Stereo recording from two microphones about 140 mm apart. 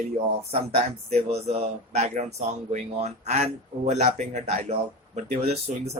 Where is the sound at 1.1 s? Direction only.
50° right (ahead or behind).